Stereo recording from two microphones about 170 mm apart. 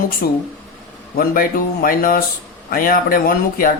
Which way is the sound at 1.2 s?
55° left (ahead or behind).